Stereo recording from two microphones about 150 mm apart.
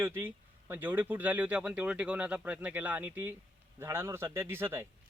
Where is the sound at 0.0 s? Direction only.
15° right (ahead or behind).